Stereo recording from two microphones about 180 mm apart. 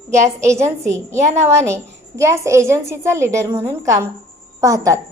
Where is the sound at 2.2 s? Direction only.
15° right (ahead or behind).